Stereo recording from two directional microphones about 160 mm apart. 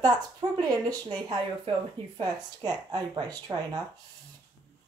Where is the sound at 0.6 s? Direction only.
25° right (ahead or behind).